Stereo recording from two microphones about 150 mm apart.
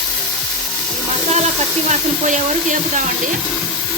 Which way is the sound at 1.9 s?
55° right (ahead or behind).